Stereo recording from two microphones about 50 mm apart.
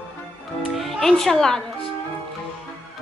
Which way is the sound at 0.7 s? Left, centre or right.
Centre.